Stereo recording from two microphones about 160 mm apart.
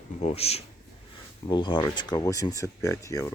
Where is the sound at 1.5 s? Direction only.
30° left (ahead or behind).